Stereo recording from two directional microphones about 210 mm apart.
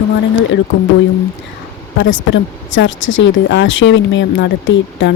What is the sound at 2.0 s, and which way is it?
Speech, 65° left (ahead or behind).